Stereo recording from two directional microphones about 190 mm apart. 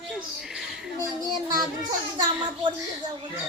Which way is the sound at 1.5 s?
20° right (ahead or behind).